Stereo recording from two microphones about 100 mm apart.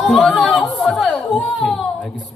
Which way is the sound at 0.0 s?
5° left (ahead or behind).